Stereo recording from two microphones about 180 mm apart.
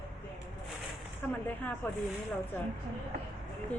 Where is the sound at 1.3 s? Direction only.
10° left (ahead or behind).